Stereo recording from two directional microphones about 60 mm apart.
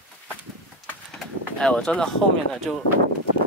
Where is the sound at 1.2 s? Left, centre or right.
Centre.